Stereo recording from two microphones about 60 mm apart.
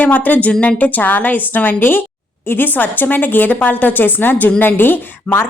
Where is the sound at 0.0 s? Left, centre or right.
Left.